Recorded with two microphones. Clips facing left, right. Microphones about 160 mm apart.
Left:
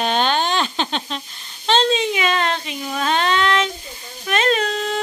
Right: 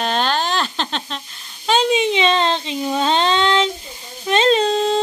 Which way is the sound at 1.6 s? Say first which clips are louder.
Right 1 dB; 10° right (ahead or behind).